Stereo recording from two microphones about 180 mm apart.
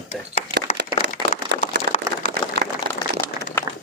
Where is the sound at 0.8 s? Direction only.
70° right (ahead or behind).